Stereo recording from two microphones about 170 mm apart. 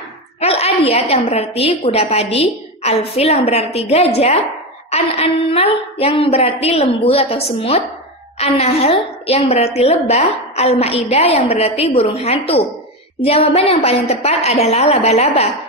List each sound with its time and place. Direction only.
0.4 s a woman's voice: 35° left (ahead or behind)